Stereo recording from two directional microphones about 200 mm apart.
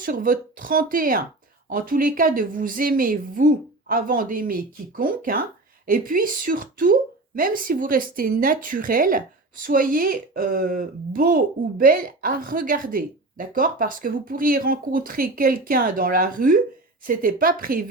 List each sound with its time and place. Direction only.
0.0 s speech: 45° right (ahead or behind)